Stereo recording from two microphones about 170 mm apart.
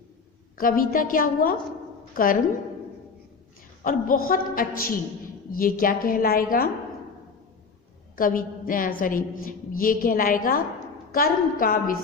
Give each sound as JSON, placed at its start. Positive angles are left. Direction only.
{"t": 0.5, "sound": "a woman's voice", "side_deg": 55}
{"t": 3.8, "sound": "a woman's voice", "side_deg": 55}
{"t": 8.1, "sound": "a woman's voice", "side_deg": 55}